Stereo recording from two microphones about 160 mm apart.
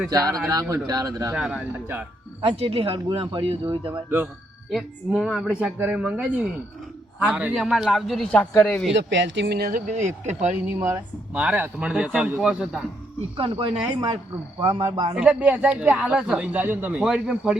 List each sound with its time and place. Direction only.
0.1 s speech: 20° right (ahead or behind)
1.4 s a man's voice: 5° right (ahead or behind)
2.4 s speech: 35° right (ahead or behind)
4.7 s speech: centre (ahead or behind); by 8.8 s 15° left (ahead or behind)
8.9 s speech: 90° right; by 10.5 s 45° right (ahead or behind)
10.7 s a man's voice: 15° right (ahead or behind)
13.3 s speech: 35° right (ahead or behind)
15.1 s a man's voice: 5° right (ahead or behind)